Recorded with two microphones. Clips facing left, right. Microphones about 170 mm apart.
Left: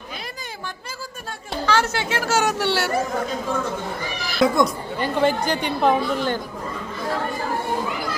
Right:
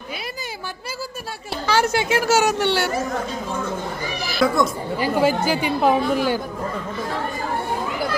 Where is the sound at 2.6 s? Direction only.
5° left (ahead or behind).